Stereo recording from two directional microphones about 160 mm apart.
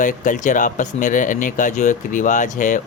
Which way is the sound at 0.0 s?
55° left (ahead or behind).